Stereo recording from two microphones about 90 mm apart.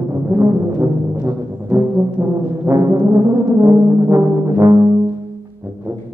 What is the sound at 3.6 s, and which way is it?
Music, 35° right (ahead or behind).